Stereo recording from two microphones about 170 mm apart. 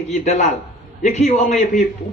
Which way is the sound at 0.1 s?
45° left (ahead or behind).